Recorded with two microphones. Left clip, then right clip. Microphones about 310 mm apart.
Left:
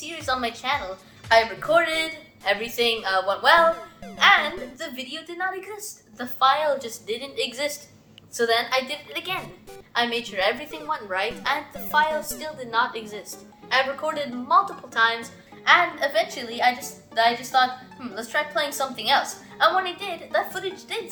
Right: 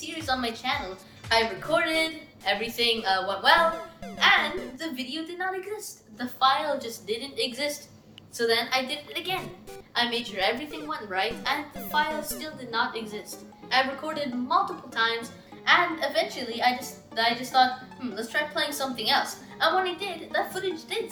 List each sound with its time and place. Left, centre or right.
0.0 s a woman's voice: centre
3.7 s speech: centre
4.2 s speech: centre
12.1 s a woman's voice: centre
12.4 s speech: centre